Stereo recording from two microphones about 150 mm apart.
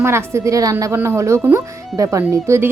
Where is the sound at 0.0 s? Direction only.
15° right (ahead or behind).